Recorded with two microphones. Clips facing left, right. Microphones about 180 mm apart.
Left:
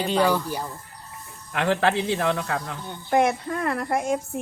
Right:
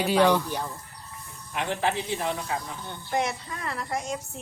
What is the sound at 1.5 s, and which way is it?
A man's voice, 75° left (ahead or behind).